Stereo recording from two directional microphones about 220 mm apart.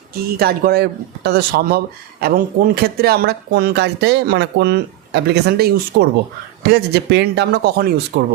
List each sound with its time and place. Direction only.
0.1 s speech: 45° right (ahead or behind)